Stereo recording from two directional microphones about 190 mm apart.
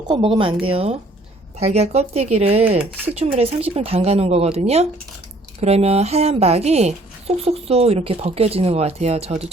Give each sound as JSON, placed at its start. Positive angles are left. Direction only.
{"t": 0.1, "sound": "speech", "side_deg": -25}